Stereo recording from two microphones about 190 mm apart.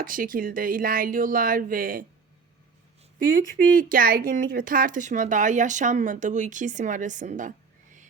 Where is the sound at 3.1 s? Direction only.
45° right (ahead or behind).